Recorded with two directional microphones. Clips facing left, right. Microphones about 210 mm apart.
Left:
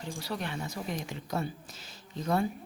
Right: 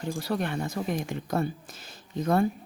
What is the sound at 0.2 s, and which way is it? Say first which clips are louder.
Speech: right 6 dB; 55° right (ahead or behind).